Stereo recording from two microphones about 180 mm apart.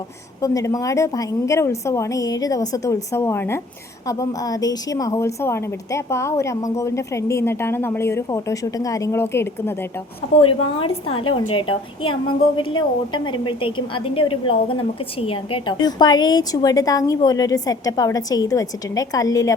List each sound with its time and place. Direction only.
0.4 s a woman's voice: 20° left (ahead or behind)
10.4 s a woman's voice: 30° left (ahead or behind)